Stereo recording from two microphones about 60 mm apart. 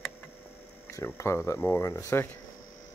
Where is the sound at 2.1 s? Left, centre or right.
Left.